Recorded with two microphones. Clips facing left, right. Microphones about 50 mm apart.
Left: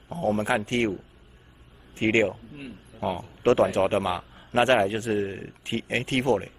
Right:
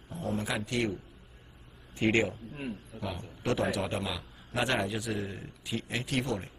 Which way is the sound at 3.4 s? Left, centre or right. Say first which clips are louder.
Left 10 dB; left.